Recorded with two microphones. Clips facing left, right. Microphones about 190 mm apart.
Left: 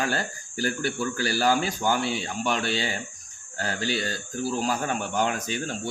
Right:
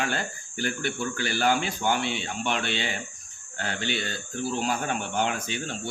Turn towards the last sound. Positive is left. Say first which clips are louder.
# left 2 dB
turn(degrees=40)  # may be behind; listen again after turning